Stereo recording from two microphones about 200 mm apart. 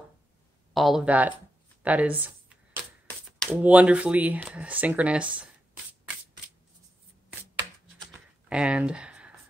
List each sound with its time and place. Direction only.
0.7 s speech: centre (ahead or behind)
8.0 s computer keyboard: 5° right (ahead or behind)